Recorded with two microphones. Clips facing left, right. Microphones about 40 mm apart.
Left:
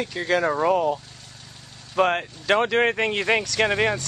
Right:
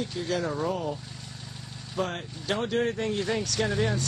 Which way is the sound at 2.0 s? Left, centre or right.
Left.